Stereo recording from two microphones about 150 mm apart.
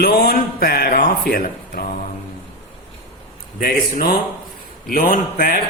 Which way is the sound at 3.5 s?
75° left (ahead or behind).